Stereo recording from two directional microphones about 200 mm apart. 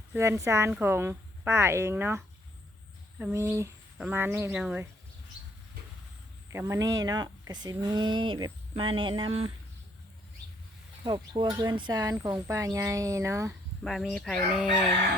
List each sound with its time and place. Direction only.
0.1 s a woman's voice: 15° right (ahead or behind)
6.5 s speech: 15° right (ahead or behind)
11.0 s a woman's voice: 25° right (ahead or behind)
13.8 s chicken: centre (ahead or behind)